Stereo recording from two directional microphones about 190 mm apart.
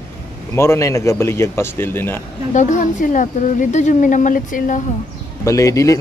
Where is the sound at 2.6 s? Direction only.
40° left (ahead or behind).